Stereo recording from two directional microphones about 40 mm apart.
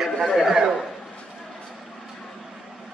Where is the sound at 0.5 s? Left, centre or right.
Centre.